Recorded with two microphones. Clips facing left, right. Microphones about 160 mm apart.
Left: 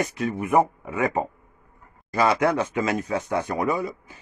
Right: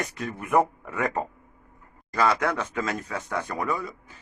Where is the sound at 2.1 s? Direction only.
20° left (ahead or behind).